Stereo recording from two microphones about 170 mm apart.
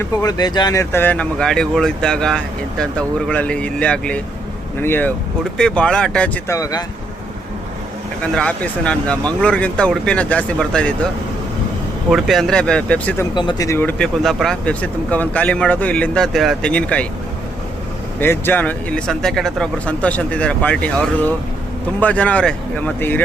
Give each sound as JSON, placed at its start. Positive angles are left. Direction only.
{"t": 0.0, "sound": "speech", "side_deg": 20}
{"t": 6.6, "sound": "speech", "side_deg": 20}
{"t": 8.2, "sound": "speech", "side_deg": 5}
{"t": 12.1, "sound": "speech", "side_deg": 0}
{"t": 13.3, "sound": "speech", "side_deg": 25}
{"t": 13.7, "sound": "speech", "side_deg": 10}
{"t": 18.2, "sound": "speech", "side_deg": 10}